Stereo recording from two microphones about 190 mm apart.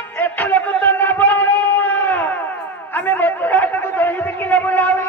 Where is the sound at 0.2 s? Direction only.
10° left (ahead or behind).